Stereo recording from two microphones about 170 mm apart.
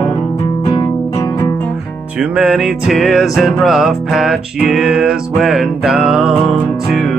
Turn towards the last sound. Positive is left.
turn(degrees=0)  # may be behind; listen again after turning